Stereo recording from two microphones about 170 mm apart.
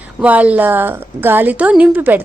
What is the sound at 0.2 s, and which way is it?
A woman's voice, 10° right (ahead or behind).